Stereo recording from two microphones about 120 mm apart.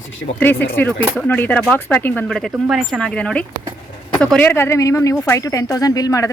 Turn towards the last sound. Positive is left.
turn(degrees=25)  # may be behind; listen again after turning